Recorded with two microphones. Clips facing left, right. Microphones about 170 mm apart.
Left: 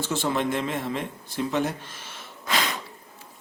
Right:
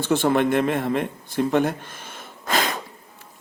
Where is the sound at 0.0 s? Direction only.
60° right (ahead or behind).